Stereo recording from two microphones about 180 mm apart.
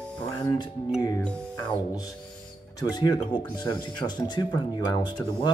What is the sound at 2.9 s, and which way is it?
Speech, 25° left (ahead or behind).